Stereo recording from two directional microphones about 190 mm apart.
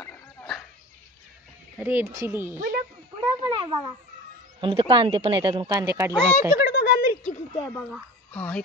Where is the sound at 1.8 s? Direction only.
10° right (ahead or behind).